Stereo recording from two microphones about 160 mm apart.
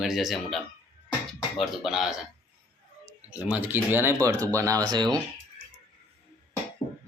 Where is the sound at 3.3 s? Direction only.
10° right (ahead or behind); by 5.0 s 25° right (ahead or behind).